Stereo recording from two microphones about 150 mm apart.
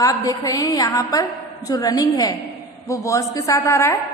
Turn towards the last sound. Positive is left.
turn(degrees=20)  # may be behind; listen again after turning